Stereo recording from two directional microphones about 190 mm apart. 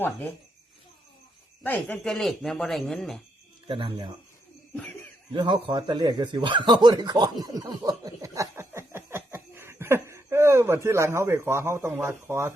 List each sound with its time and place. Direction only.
0.0 s speech: 10° left (ahead or behind)
1.6 s speech: 10° left (ahead or behind)
3.7 s speech: 25° right (ahead or behind)
4.7 s laughter: 5° left (ahead or behind)
5.3 s speech: 25° right (ahead or behind)